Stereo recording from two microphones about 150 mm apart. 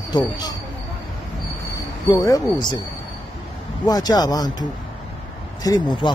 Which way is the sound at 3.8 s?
25° left (ahead or behind).